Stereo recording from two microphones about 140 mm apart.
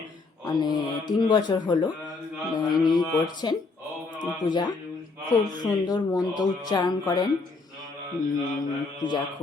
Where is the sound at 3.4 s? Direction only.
35° left (ahead or behind).